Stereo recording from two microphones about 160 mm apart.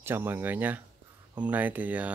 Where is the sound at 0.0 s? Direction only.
15° right (ahead or behind).